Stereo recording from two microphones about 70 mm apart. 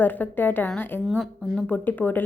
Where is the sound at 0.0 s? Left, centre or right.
Left.